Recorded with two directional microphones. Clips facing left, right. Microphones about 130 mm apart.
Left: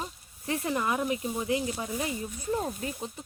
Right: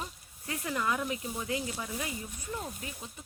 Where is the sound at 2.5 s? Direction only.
40° left (ahead or behind).